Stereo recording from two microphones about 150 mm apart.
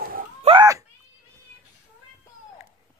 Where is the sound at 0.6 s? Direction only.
20° right (ahead or behind).